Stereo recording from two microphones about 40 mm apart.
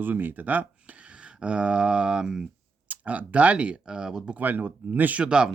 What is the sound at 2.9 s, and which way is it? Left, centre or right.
Speech, right.